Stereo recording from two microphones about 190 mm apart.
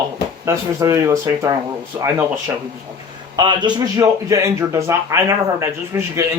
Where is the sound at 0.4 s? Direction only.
15° right (ahead or behind).